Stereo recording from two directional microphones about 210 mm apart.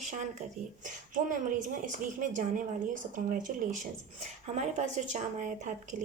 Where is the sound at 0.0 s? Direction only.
35° right (ahead or behind).